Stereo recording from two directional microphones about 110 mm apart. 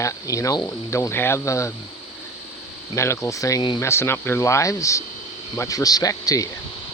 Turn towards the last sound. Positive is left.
turn(degrees=30)  # may be behind; listen again after turning